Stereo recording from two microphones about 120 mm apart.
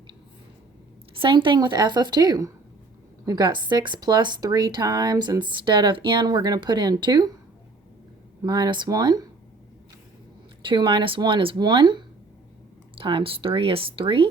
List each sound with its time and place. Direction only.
1.2 s speech: 45° right (ahead or behind)
8.4 s speech: 35° right (ahead or behind)
10.7 s speech: 40° right (ahead or behind)